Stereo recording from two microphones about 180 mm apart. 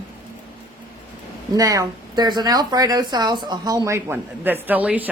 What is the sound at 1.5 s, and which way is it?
Speech, 20° right (ahead or behind).